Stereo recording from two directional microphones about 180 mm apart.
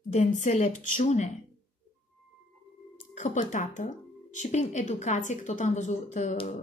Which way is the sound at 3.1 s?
45° left (ahead or behind).